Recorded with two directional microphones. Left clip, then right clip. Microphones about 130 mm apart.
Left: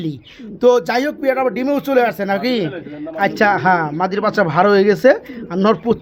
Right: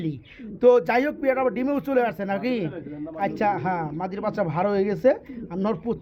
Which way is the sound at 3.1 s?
90° left.